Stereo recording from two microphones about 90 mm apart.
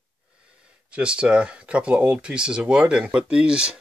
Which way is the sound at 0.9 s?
10° right (ahead or behind).